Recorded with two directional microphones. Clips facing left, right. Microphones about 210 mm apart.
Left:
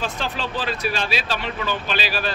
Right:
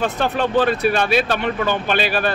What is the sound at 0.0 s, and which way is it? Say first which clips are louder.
Speech: right 8 dB; 60° right (ahead or behind).